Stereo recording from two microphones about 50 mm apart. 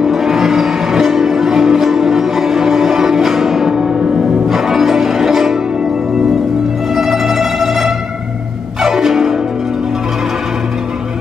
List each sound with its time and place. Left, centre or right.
0.0 s music: centre
4.0 s music: centre
4.5 s music: centre
7.0 s music: centre